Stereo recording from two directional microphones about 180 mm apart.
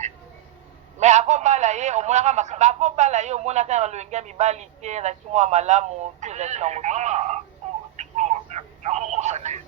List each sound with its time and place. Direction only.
0.9 s a man's voice: 40° right (ahead or behind)
7.9 s telephone: 40° right (ahead or behind)